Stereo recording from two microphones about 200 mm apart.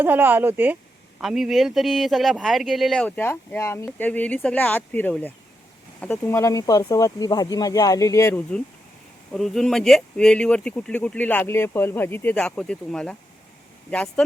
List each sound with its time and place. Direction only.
0.0 s speech: 10° right (ahead or behind)